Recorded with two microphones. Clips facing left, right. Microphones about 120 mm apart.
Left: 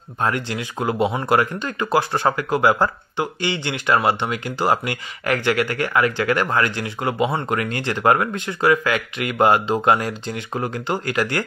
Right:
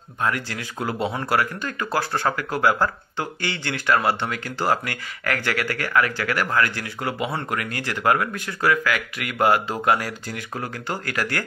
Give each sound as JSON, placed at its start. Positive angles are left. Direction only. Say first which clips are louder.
{"t": 0.2, "sound": "speech", "louder": "left 3 dB", "side_deg": 25}